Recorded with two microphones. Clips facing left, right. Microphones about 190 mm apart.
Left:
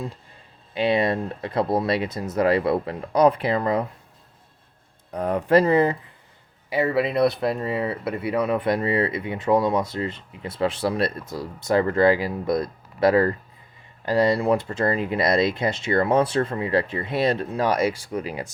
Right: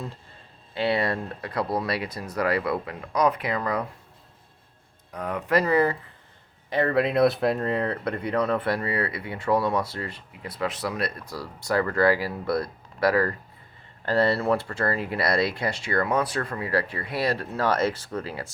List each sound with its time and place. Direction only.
0.7 s speech: 20° left (ahead or behind)
5.1 s speech: 35° left (ahead or behind)
6.7 s speech: 5° left (ahead or behind)